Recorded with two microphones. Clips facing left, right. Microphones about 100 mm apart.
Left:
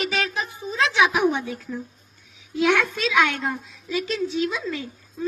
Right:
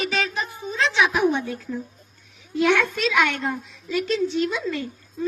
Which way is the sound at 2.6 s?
5° left (ahead or behind).